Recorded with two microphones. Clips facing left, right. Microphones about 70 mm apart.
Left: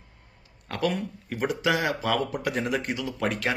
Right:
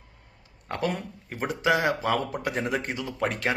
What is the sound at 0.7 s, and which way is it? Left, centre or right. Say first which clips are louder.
Speech: left 2 dB; right.